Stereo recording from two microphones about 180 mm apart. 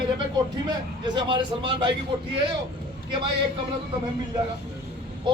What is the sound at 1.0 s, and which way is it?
Speech, 25° right (ahead or behind).